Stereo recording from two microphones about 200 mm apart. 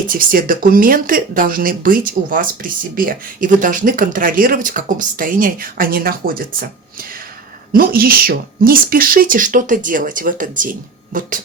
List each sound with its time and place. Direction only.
0.1 s speech: 45° right (ahead or behind)
7.7 s speech: 45° right (ahead or behind)